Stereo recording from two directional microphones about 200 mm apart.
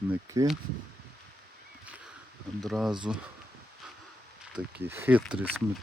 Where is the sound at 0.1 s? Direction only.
15° right (ahead or behind).